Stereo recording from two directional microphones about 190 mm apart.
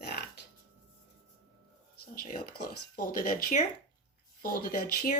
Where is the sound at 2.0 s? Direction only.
50° left (ahead or behind).